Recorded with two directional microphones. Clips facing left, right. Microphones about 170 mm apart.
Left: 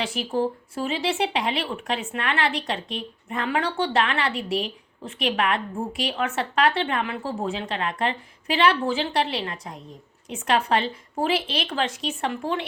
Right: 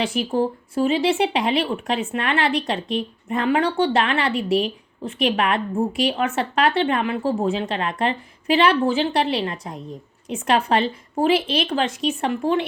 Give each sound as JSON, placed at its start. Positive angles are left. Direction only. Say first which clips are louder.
{"t": 0.0, "sound": "speech", "louder": "right 4 dB", "side_deg": -20}